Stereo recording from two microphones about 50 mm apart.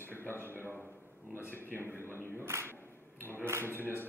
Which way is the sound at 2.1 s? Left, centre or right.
Right.